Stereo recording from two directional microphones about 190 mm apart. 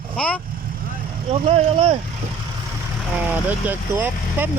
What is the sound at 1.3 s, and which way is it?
Speech, 30° right (ahead or behind).